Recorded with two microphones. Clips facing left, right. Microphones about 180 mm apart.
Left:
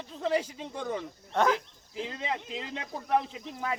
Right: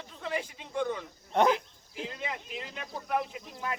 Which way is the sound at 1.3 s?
20° right (ahead or behind).